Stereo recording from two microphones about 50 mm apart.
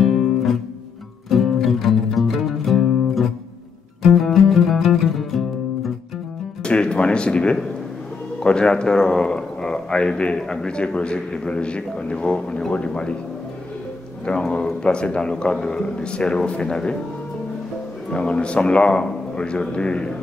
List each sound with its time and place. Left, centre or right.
0.0 s music: centre
6.6 s music: left
8.4 s speech: centre
14.3 s speech: left
18.1 s speech: left